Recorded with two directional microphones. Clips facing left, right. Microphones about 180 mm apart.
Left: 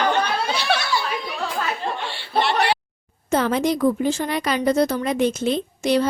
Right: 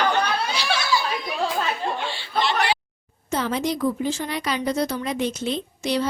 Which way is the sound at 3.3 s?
55° left (ahead or behind).